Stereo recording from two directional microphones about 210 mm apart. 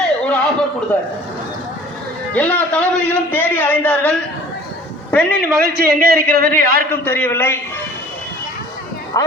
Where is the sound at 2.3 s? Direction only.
5° left (ahead or behind).